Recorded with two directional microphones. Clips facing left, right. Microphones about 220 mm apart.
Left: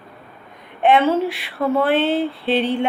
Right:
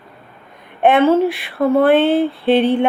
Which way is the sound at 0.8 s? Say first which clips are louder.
Right 4 dB; 55° right (ahead or behind).